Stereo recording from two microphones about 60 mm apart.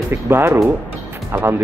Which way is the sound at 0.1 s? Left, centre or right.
Right.